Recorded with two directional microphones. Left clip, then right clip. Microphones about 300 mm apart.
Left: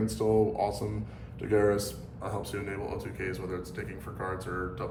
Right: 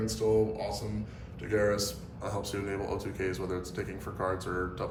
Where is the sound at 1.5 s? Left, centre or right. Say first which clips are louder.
Left 2 dB; centre.